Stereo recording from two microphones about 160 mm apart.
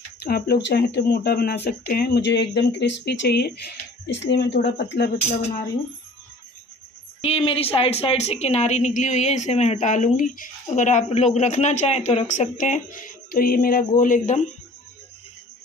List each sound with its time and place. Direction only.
0.2 s speech: 85° left
7.2 s a woman's voice: 40° left (ahead or behind)